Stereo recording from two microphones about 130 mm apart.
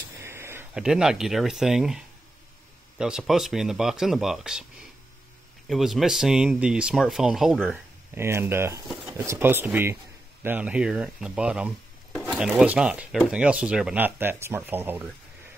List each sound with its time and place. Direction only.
0.2 s a sound: 20° right (ahead or behind)
0.7 s speech: 5° right (ahead or behind)
5.7 s speech: centre (ahead or behind)
8.1 s speech: 20° right (ahead or behind)